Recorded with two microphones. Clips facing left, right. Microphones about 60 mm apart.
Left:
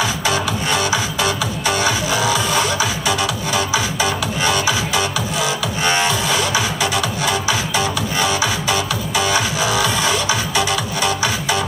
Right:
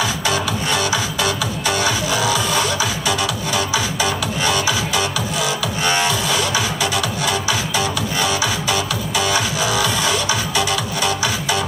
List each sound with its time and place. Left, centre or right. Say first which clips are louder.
0.0 s music: left 1 dB; left